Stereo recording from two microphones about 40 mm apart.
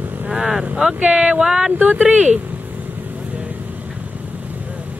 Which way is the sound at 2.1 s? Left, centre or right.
Right.